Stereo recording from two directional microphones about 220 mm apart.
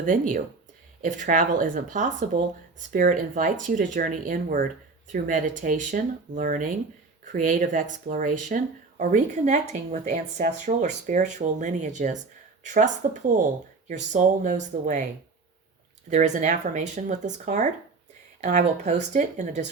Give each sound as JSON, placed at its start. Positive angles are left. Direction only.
{"t": 0.0, "sound": "speech", "side_deg": -35}
{"t": 16.0, "sound": "speech", "side_deg": -35}